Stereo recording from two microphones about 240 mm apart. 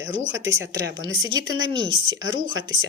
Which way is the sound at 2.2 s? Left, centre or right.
Right.